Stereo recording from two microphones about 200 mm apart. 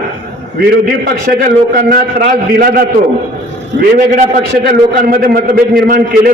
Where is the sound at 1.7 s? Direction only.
45° right (ahead or behind).